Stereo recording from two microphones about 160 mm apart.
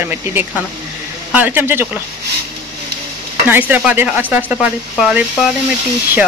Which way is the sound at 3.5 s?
10° right (ahead or behind).